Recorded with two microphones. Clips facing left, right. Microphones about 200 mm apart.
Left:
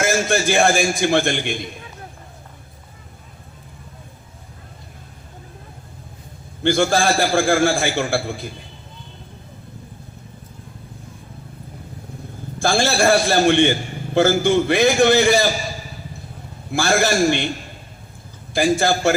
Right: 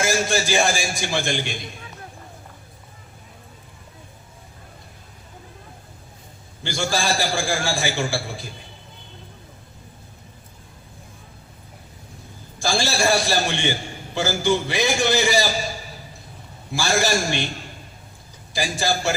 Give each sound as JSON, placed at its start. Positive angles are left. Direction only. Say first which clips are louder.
{"t": 0.0, "sound": "a man's voice", "louder": "left 3 dB", "side_deg": 55}
{"t": 6.6, "sound": "a man's voice", "louder": "left 8 dB", "side_deg": 55}
{"t": 12.5, "sound": "a man's voice", "louder": "left 5 dB", "side_deg": 55}
{"t": 16.7, "sound": "a man's voice", "louder": "left 4 dB", "side_deg": 55}
{"t": 18.5, "sound": "a man's voice", "louder": "left 7 dB", "side_deg": 55}